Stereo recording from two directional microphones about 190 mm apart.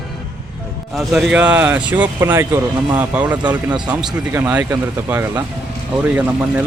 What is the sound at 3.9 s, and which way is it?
Speech, 5° right (ahead or behind).